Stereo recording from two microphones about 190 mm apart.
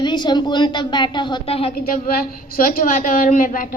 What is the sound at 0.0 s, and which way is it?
A woman's voice, 25° left (ahead or behind).